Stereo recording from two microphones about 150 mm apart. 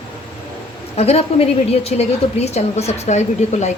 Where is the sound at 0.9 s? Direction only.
45° left (ahead or behind).